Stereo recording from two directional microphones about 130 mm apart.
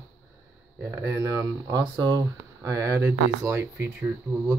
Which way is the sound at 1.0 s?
25° right (ahead or behind).